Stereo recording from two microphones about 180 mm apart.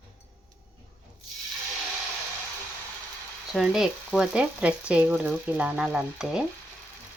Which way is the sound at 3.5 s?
Centre (ahead or behind).